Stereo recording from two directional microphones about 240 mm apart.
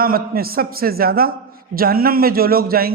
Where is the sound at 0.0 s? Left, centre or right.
Right.